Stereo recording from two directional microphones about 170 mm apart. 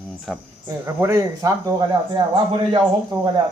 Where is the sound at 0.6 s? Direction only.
15° right (ahead or behind).